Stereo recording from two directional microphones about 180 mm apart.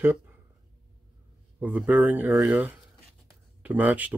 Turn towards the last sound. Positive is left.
turn(degrees=-10)  # may be behind; listen again after turning